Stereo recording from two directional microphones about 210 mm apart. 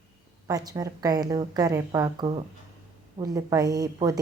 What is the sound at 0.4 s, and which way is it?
A woman's voice, 15° right (ahead or behind).